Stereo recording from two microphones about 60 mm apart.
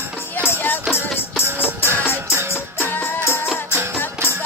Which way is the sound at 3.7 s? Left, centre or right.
Right.